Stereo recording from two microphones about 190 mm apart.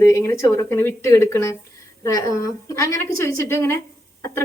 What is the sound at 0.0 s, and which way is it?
A woman's voice, 15° left (ahead or behind).